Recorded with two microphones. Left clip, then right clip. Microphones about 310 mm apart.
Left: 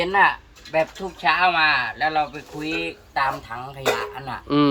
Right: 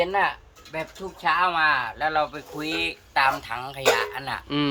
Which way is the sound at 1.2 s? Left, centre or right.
Centre.